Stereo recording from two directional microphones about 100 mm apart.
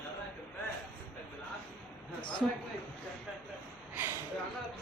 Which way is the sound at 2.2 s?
50° left (ahead or behind).